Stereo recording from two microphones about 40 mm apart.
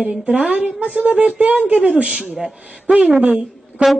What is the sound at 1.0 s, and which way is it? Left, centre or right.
A woman's voice, right.